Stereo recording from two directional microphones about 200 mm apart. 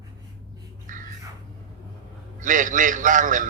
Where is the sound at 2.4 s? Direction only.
40° right (ahead or behind).